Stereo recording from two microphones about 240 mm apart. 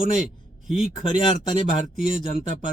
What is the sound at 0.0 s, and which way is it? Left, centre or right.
Speech, right.